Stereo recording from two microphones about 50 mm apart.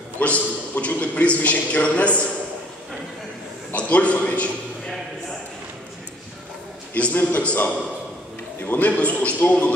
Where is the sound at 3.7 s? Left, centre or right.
Left.